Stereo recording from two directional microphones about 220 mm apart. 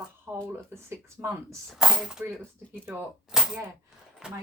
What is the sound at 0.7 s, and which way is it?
Speech, 10° right (ahead or behind).